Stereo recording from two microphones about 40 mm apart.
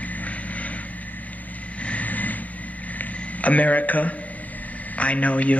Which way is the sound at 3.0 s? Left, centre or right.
Left.